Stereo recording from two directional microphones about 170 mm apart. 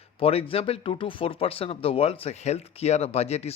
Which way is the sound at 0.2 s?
35° left (ahead or behind).